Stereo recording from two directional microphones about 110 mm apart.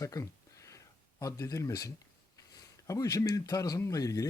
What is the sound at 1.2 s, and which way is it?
Speech, 30° left (ahead or behind).